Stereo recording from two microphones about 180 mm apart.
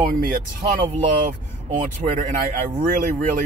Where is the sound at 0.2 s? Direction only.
50° right (ahead or behind).